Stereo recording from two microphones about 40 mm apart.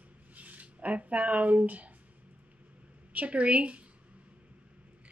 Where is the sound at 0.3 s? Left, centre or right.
Right.